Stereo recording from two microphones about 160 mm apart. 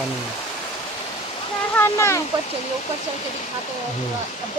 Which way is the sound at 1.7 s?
15° left (ahead or behind).